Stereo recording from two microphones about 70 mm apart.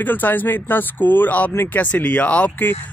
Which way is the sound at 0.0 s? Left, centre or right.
Left.